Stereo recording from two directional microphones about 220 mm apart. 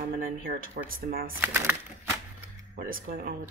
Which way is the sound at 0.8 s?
40° right (ahead or behind).